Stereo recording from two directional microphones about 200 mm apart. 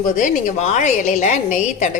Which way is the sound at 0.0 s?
40° left (ahead or behind).